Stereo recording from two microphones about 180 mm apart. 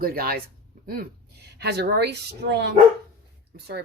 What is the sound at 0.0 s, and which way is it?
A woman's voice, 55° right (ahead or behind).